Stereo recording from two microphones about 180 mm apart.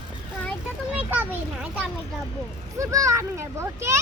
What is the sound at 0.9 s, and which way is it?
Speech, 10° right (ahead or behind).